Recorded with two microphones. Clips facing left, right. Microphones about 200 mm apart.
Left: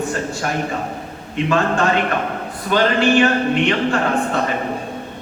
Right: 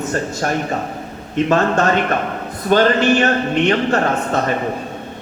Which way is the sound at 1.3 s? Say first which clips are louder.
Right 3 dB; 40° right (ahead or behind).